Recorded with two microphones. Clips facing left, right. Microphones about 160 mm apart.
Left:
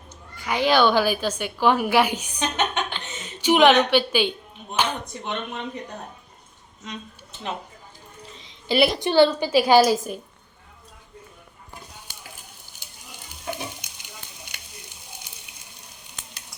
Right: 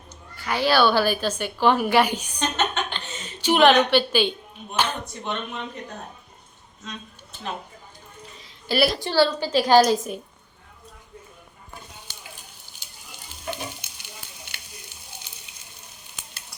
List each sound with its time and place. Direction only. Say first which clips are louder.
0.3 s a woman's voice: left 1 dB; 15° left (ahead or behind)
4.8 s a sound: left 1 dB; 15° left (ahead or behind)
8.6 s a woman's voice: left 2 dB; 20° left (ahead or behind); by 10.2 s centre (ahead or behind)
13.5 s stir: left 1 dB; 15° left (ahead or behind)